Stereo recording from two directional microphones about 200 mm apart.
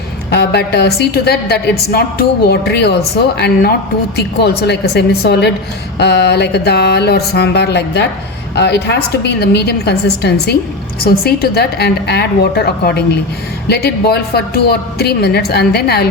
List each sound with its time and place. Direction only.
0.3 s a woman's voice: 55° left (ahead or behind)